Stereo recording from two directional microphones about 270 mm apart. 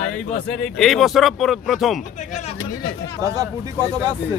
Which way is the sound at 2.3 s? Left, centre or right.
Left.